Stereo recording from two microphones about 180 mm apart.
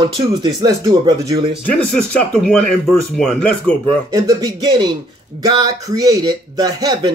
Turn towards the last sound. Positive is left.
turn(degrees=-20)  # may be behind; listen again after turning